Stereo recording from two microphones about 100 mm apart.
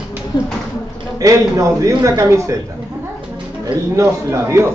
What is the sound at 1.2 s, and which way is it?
A man's voice, 35° right (ahead or behind).